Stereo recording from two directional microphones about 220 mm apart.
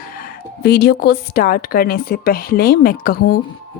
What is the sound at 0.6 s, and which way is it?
Speech, 50° left (ahead or behind).